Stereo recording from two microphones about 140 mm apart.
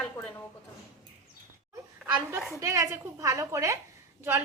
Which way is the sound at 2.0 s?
15° right (ahead or behind).